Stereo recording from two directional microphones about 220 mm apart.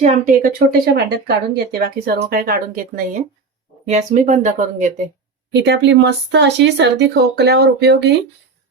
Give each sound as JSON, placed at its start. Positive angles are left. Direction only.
{"t": 0.0, "sound": "speech", "side_deg": -35}
{"t": 0.9, "sound": "speech", "side_deg": -45}
{"t": 5.5, "sound": "speech", "side_deg": -50}